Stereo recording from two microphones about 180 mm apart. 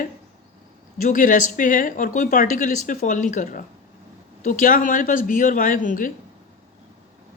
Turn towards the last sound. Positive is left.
turn(degrees=50)  # may be behind; listen again after turning